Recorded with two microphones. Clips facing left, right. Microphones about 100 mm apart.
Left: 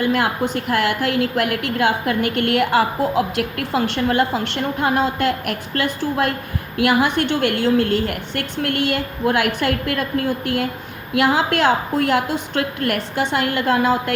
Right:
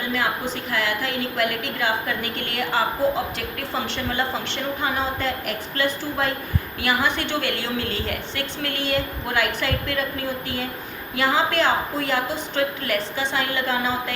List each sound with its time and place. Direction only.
0.0 s a woman's voice: 60° left (ahead or behind)